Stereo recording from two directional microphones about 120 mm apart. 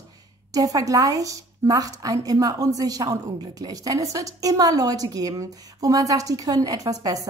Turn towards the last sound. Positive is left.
turn(degrees=-30)  # may be behind; listen again after turning